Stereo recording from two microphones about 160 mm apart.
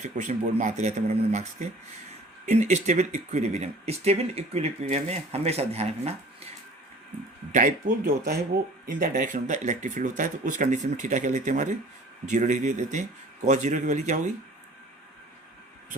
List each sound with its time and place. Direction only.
0.0 s speech: 50° right (ahead or behind)
7.5 s speech: 60° right (ahead or behind)